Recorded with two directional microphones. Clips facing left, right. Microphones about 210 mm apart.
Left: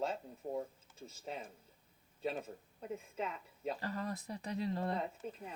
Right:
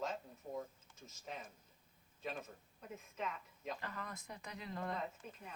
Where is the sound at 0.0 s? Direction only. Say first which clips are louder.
Left 5 dB; 30° left (ahead or behind).